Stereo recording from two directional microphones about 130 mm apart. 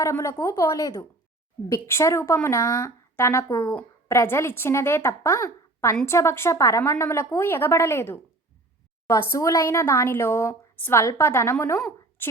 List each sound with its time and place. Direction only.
0.0 s a woman's voice: 25° left (ahead or behind)
9.3 s a woman's voice: 25° left (ahead or behind)